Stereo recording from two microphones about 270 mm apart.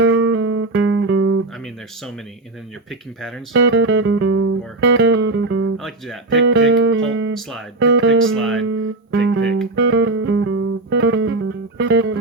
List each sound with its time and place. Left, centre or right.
0.0 s music: right
3.5 s music: right
4.3 s music: right
4.9 s music: right
5.7 s speech: centre
6.5 s music: right
8.4 s speech: centre
8.7 s music: right